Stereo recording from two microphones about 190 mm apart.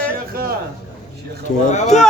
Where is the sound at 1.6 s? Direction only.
40° left (ahead or behind).